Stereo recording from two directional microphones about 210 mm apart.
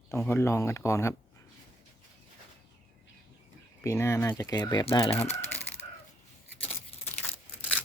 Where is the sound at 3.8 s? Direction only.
15° left (ahead or behind).